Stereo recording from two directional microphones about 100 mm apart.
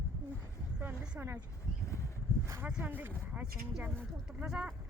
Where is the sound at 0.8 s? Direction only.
20° right (ahead or behind).